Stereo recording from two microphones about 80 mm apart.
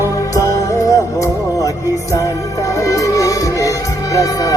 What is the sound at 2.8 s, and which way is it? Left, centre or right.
Music, left.